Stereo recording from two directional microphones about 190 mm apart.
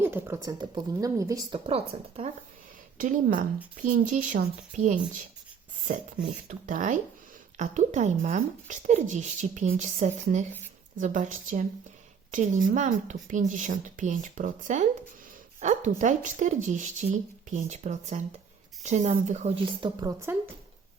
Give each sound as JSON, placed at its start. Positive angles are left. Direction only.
{"t": 0.0, "sound": "speech", "side_deg": -10}
{"t": 3.0, "sound": "speech", "side_deg": -45}
{"t": 6.7, "sound": "speech", "side_deg": -45}
{"t": 19.8, "sound": "speech", "side_deg": -20}